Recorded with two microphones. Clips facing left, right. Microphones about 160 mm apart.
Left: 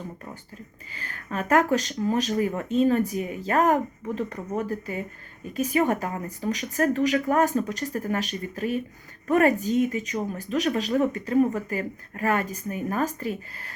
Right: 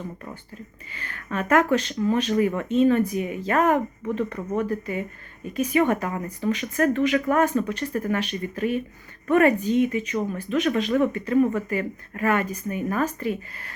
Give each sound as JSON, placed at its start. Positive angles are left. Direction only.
{"t": 0.9, "sound": "speech", "side_deg": 35}